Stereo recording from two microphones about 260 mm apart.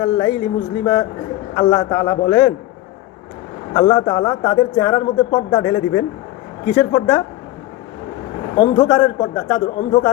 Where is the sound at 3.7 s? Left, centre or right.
Centre.